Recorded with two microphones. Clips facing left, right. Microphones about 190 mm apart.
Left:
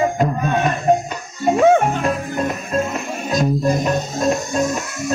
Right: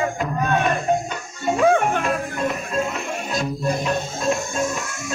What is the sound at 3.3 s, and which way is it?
Music, 40° left (ahead or behind).